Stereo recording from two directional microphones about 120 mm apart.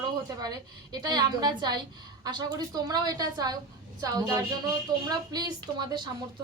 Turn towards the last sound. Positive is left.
turn(degrees=-35)  # may be behind; listen again after turning